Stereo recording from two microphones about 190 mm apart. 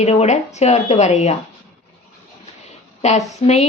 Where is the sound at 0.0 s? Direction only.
35° left (ahead or behind).